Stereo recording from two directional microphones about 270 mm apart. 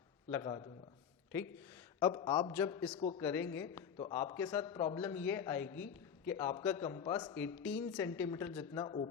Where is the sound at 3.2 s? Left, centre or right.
Centre.